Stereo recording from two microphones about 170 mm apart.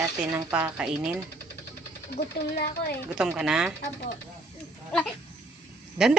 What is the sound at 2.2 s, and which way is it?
Speech, 65° left (ahead or behind).